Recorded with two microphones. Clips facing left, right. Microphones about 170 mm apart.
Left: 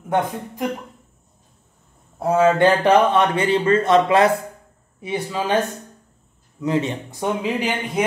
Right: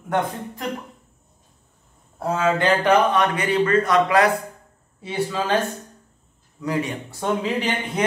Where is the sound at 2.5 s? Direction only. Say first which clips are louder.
Left 3 dB; 25° left (ahead or behind).